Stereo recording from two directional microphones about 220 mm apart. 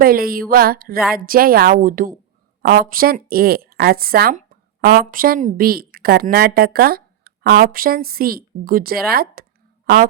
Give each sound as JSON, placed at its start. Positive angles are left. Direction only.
{"t": 0.0, "sound": "a woman's voice", "side_deg": -40}